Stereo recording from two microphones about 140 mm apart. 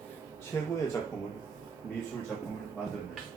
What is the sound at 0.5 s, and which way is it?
Speech, 20° left (ahead or behind).